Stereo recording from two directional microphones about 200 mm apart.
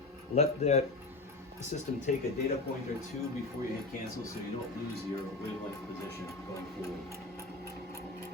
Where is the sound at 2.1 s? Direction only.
40° left (ahead or behind).